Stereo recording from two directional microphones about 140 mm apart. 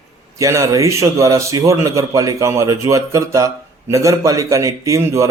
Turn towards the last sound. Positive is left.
turn(degrees=-20)  # may be behind; listen again after turning